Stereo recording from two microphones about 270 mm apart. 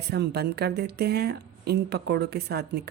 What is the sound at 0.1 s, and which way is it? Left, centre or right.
Speech, right.